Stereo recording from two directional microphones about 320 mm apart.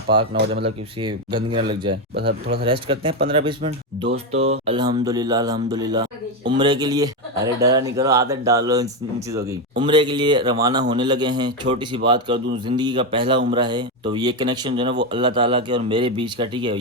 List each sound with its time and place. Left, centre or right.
0.6 s speech: centre
2.1 s speech: right
2.8 s speech: centre